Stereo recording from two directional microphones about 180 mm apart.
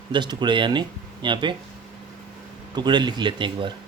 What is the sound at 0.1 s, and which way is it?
Speech, 25° right (ahead or behind).